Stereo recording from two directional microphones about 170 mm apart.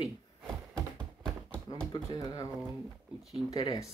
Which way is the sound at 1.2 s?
5° left (ahead or behind).